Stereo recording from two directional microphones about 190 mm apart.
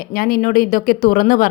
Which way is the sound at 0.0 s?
50° left (ahead or behind).